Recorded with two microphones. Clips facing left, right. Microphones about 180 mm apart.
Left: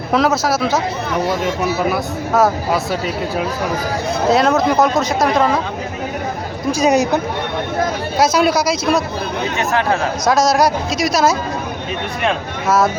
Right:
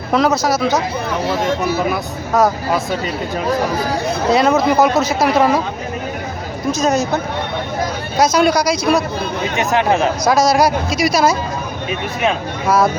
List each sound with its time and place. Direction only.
0.1 s speech: centre (ahead or behind)
6.7 s speech: 10° left (ahead or behind)
8.2 s speech: 5° left (ahead or behind)
9.6 s speech: 15° right (ahead or behind)
10.2 s speech: centre (ahead or behind)